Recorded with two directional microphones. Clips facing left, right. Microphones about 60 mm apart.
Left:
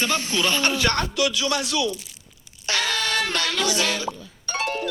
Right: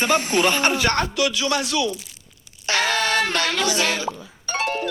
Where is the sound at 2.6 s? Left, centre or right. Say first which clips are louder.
Right 4 dB; right.